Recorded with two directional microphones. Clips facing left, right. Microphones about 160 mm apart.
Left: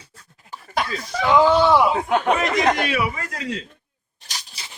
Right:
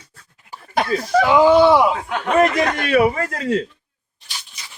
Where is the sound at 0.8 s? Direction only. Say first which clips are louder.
Right 5 dB; 55° right (ahead or behind).